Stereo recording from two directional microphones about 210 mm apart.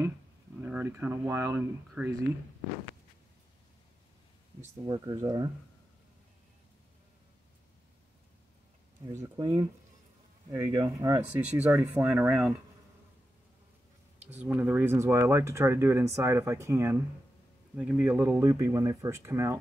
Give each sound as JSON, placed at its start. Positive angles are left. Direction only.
{"t": 0.6, "sound": "speech", "side_deg": -10}
{"t": 4.6, "sound": "speech", "side_deg": -20}
{"t": 9.1, "sound": "speech", "side_deg": -15}
{"t": 14.4, "sound": "speech", "side_deg": -10}